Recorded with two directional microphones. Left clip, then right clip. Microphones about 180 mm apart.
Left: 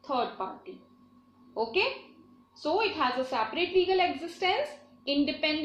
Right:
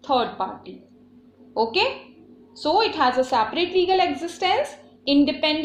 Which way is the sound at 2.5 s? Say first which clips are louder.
Right 8 dB; 50° right (ahead or behind).